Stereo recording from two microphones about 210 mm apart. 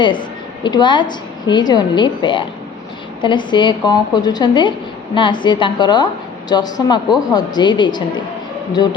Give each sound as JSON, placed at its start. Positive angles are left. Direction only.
{"t": 0.0, "sound": "a woman's voice", "side_deg": 20}